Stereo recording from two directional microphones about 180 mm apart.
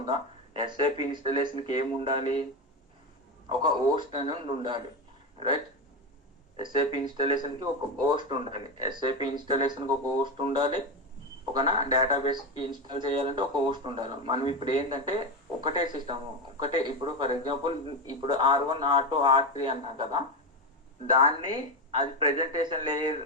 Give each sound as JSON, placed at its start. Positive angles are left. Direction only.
{"t": 0.0, "sound": "speech", "side_deg": -25}
{"t": 3.5, "sound": "speech", "side_deg": -25}
{"t": 6.6, "sound": "speech", "side_deg": -25}